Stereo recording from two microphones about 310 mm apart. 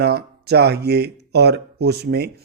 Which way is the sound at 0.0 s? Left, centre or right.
Right.